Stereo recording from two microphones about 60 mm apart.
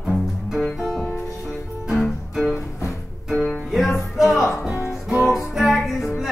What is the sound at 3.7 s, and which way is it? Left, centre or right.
Music, centre.